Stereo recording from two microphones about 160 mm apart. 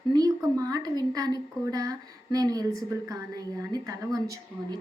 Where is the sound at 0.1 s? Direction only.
25° right (ahead or behind).